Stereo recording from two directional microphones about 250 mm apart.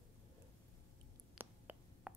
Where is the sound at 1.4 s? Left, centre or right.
Centre.